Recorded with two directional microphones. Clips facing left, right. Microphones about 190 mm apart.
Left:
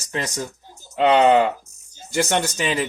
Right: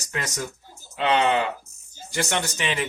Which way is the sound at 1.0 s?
40° left (ahead or behind).